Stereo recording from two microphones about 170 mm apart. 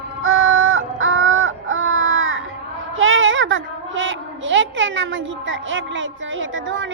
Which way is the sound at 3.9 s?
90° right.